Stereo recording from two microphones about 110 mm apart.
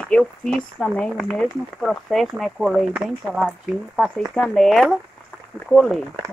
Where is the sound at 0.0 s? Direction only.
5° left (ahead or behind).